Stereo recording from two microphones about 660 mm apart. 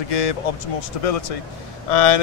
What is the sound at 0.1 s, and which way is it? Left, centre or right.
Speech, left.